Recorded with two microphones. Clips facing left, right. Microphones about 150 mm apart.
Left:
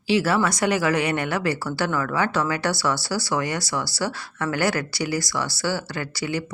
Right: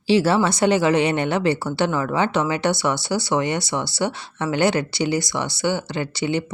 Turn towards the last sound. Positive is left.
turn(degrees=-25)  # may be behind; listen again after turning